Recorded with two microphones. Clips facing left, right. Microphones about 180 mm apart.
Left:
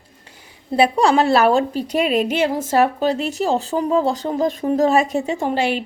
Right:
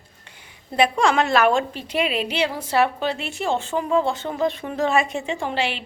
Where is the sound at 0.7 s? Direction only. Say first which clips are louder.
Left 4 dB; 35° left (ahead or behind).